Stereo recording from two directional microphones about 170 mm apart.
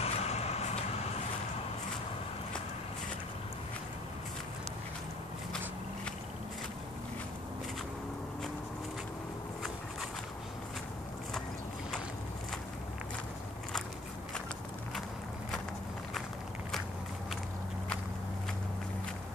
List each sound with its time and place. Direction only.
0.0 s vehicle: 40° left (ahead or behind)